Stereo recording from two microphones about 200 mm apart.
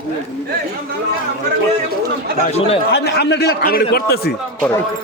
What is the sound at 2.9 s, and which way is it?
A man's voice, 55° left (ahead or behind).